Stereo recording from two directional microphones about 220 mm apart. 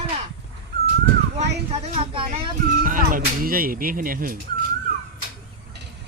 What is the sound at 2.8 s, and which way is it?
Speech, 40° right (ahead or behind).